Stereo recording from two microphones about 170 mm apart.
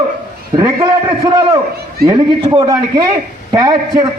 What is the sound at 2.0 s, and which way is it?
Speech, 25° right (ahead or behind).